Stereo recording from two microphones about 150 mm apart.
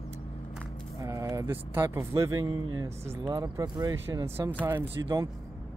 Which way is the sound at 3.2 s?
25° right (ahead or behind).